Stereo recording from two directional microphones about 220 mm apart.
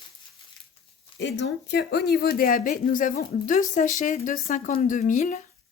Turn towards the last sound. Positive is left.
turn(degrees=35)  # may be behind; listen again after turning